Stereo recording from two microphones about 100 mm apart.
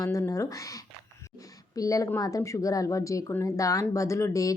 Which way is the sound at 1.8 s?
35° left (ahead or behind).